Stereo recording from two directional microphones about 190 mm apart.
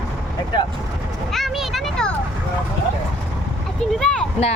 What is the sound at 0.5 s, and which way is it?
Vehicle, 25° left (ahead or behind).